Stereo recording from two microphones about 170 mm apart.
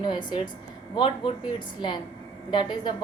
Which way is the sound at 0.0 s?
25° left (ahead or behind).